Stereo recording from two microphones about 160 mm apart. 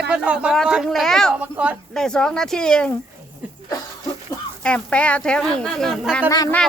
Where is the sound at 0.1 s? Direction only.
5° right (ahead or behind).